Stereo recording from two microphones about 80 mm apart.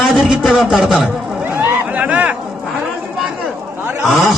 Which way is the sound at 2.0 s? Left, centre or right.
Centre.